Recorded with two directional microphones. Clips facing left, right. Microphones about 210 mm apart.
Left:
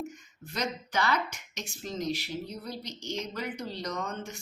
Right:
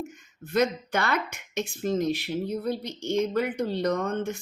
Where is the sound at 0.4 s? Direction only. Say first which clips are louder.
Right 10 dB; 55° right (ahead or behind).